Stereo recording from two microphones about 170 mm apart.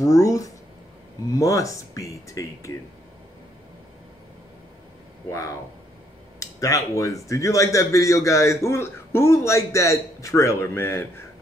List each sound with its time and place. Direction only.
0.0 s speech: 20° left (ahead or behind)
5.3 s speech: 20° left (ahead or behind)